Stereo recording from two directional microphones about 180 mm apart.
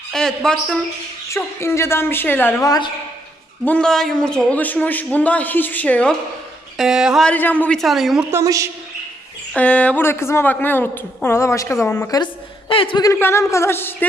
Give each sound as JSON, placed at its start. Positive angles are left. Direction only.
{"t": 0.1, "sound": "a woman's voice", "side_deg": 5}
{"t": 1.3, "sound": "a woman's voice", "side_deg": 15}
{"t": 3.7, "sound": "a woman's voice", "side_deg": 5}
{"t": 8.3, "sound": "a woman's voice", "side_deg": -15}
{"t": 9.5, "sound": "a woman's voice", "side_deg": 5}